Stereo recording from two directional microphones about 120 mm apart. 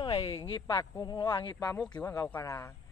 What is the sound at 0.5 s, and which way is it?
Speech, 40° left (ahead or behind).